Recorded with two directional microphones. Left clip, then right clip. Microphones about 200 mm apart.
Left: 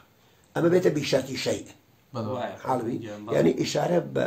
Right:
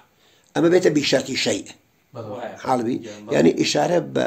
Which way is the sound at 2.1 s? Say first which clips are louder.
Left 1 dB; 60° left (ahead or behind).